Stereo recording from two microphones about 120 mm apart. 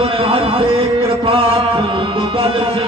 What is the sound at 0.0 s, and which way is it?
Music, 50° right (ahead or behind).